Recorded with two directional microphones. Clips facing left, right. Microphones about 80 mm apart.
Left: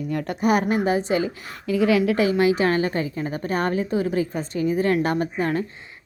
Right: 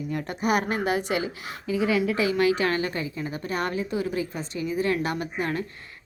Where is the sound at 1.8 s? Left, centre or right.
Left.